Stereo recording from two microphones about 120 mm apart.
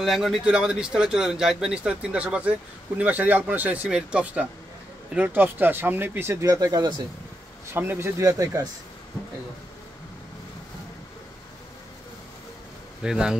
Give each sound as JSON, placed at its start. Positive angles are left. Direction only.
{"t": 0.0, "sound": "speech", "side_deg": 0}
{"t": 7.7, "sound": "speech", "side_deg": -20}
{"t": 13.0, "sound": "speech", "side_deg": -5}